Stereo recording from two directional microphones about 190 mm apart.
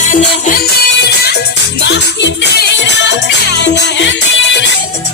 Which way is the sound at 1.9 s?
65° left (ahead or behind).